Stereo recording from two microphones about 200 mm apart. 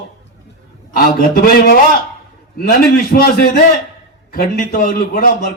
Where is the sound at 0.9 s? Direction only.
45° left (ahead or behind).